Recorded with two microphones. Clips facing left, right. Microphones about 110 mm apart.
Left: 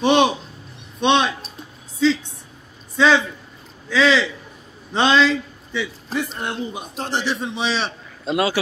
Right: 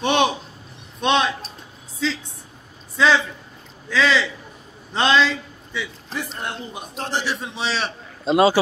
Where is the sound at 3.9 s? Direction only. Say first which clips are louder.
Left 2 dB; 5° left (ahead or behind).